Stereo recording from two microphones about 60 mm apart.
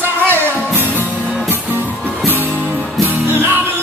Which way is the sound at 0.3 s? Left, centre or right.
Right.